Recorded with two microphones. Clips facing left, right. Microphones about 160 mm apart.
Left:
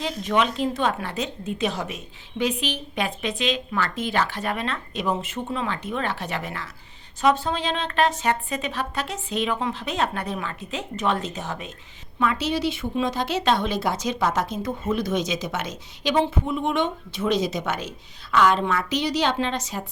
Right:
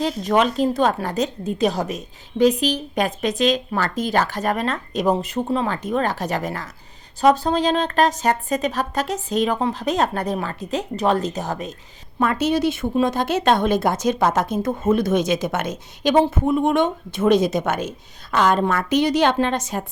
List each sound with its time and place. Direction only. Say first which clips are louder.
0.0 s speech: right 4 dB; 40° right (ahead or behind)